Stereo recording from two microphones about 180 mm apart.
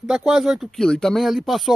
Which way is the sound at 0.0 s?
5° right (ahead or behind).